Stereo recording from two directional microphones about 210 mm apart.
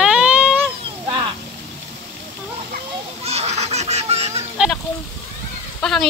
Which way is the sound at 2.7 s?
30° right (ahead or behind).